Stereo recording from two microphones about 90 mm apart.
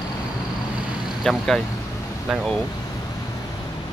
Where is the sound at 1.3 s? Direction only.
5° left (ahead or behind).